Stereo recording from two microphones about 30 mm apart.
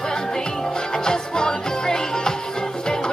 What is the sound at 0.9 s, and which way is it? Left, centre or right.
Music, left.